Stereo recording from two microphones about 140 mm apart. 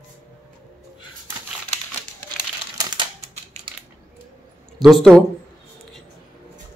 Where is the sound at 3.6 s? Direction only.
55° right (ahead or behind).